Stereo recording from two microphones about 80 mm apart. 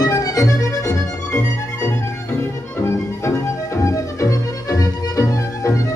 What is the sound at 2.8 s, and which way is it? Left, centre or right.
Music, left.